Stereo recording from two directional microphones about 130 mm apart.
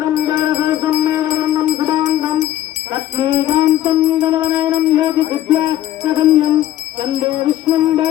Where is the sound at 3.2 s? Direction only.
40° right (ahead or behind).